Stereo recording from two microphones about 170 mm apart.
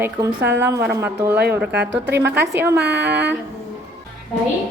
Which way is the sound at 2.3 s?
85° right.